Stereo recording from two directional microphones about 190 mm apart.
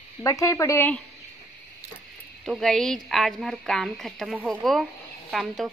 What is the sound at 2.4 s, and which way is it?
A woman's voice, centre (ahead or behind).